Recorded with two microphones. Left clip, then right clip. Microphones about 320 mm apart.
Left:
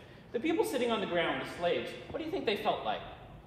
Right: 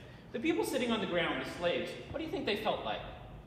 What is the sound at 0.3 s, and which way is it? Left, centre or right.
A man's voice, left.